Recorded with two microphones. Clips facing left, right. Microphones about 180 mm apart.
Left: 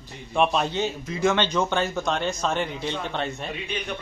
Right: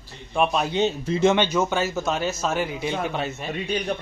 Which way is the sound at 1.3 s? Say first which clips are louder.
Right 2 dB; 10° right (ahead or behind).